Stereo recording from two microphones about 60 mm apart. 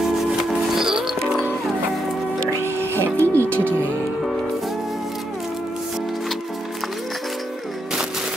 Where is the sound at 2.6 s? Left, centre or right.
Right.